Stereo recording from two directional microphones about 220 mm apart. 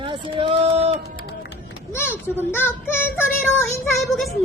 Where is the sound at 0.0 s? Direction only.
25° right (ahead or behind).